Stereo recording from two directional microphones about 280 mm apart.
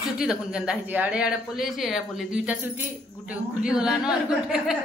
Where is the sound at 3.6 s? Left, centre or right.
Centre.